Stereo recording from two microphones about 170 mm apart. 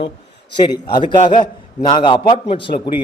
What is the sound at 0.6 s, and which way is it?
A man's voice, 25° left (ahead or behind).